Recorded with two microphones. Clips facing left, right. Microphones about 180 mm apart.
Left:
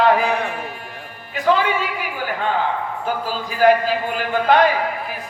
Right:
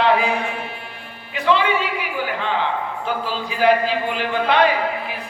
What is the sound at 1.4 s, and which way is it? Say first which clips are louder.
Speech: even; 45° left (ahead or behind).